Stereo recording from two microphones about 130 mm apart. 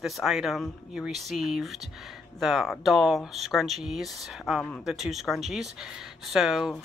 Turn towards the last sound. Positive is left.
turn(degrees=0)  # may be behind; listen again after turning